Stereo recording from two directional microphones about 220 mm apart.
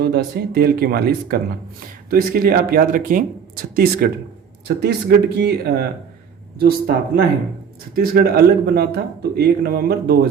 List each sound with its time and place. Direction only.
0.0 s speech: 45° right (ahead or behind)
7.9 s speech: 45° right (ahead or behind)